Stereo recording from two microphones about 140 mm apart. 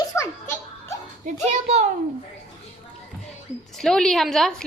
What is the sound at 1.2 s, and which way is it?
Speech, 50° right (ahead or behind).